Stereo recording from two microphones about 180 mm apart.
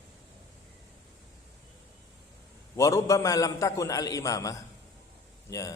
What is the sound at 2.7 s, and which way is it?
A man's voice, 15° left (ahead or behind).